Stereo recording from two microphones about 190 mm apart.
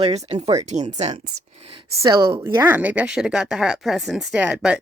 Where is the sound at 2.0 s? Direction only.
20° right (ahead or behind).